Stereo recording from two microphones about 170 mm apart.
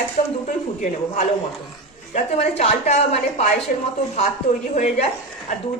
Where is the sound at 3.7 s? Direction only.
50° left (ahead or behind).